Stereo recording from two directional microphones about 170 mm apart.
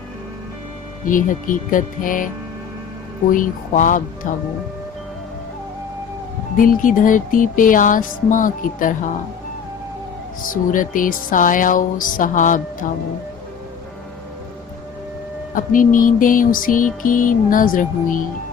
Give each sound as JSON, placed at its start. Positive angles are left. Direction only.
{"t": 1.0, "sound": "music", "side_deg": 50}
{"t": 3.3, "sound": "music", "side_deg": 50}
{"t": 6.6, "sound": "music", "side_deg": 50}
{"t": 10.4, "sound": "music", "side_deg": 50}
{"t": 15.5, "sound": "music", "side_deg": 50}